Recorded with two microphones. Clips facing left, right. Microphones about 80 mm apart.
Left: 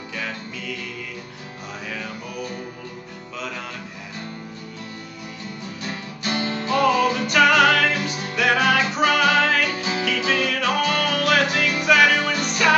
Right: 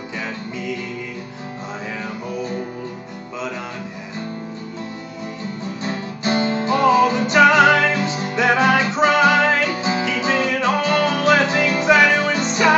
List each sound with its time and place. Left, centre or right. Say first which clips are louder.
0.2 s music: right 3 dB; right
2.0 s music: right 5 dB; right
5.8 s music: right 6 dB; right